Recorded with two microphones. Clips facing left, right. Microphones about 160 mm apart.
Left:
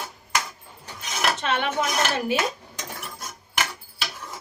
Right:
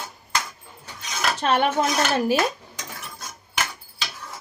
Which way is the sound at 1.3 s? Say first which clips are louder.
Right 4 dB; 35° right (ahead or behind).